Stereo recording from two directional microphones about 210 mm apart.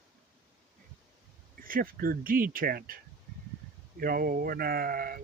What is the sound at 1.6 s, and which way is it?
Speech, 45° right (ahead or behind).